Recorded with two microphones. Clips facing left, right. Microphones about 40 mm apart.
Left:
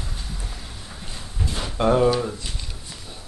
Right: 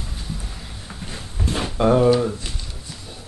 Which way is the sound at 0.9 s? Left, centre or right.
Right.